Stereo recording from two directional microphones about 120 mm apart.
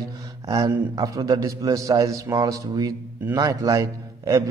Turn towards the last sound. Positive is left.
turn(degrees=-25)  # may be behind; listen again after turning